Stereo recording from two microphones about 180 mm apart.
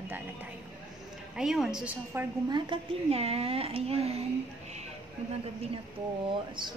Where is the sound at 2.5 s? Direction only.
25° right (ahead or behind).